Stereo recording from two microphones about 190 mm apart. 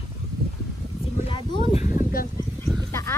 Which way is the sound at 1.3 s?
25° left (ahead or behind).